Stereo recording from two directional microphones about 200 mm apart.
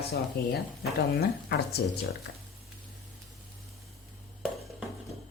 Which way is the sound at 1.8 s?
50° left (ahead or behind).